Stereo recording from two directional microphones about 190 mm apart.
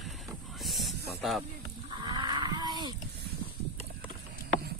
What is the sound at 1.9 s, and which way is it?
Wild animals, 20° right (ahead or behind).